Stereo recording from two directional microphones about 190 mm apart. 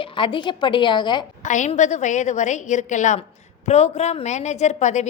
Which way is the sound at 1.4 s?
40° left (ahead or behind).